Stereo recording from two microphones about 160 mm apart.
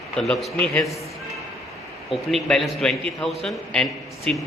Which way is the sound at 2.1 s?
Centre (ahead or behind).